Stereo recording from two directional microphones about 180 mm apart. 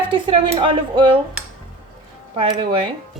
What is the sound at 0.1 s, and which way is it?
Speech, 30° right (ahead or behind).